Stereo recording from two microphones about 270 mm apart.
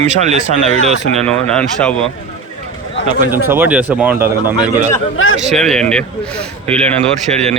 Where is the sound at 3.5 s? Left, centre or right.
Centre.